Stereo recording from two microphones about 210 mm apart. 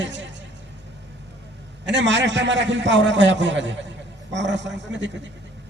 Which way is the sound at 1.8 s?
60° right (ahead or behind).